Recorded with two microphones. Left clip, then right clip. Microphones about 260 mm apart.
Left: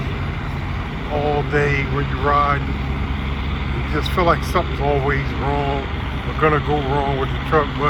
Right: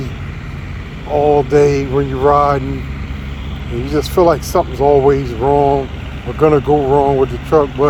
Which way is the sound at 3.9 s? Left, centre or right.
Right.